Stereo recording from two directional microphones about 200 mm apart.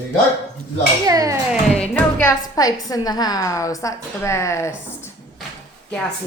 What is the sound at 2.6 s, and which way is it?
A woman's voice, 20° left (ahead or behind).